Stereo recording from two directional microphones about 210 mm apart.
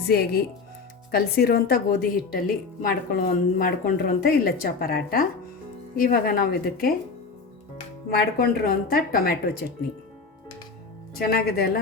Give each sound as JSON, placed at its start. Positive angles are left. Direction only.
{"t": 0.1, "sound": "a woman's voice", "side_deg": 50}
{"t": 8.1, "sound": "a woman's voice", "side_deg": 50}
{"t": 11.1, "sound": "a woman's voice", "side_deg": 45}